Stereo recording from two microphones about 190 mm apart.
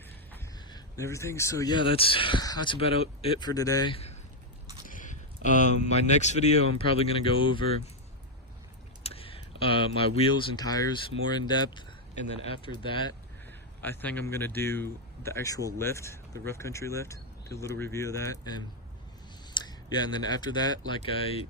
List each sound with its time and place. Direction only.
0.7 s speech: 15° left (ahead or behind)
1.9 s speech: 30° left (ahead or behind)
4.9 s speech: 45° left (ahead or behind); by 7.6 s 25° left (ahead or behind)
9.0 s speech: 30° left (ahead or behind)
13.8 s speech: 10° left (ahead or behind)
19.5 s speech: 20° left (ahead or behind)